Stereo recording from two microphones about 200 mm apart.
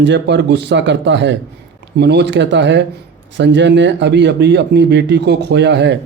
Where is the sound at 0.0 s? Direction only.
65° right (ahead or behind).